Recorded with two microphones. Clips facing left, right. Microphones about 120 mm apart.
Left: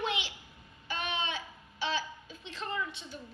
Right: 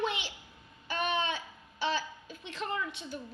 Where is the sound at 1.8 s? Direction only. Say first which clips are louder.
Right 2 dB; 50° right (ahead or behind).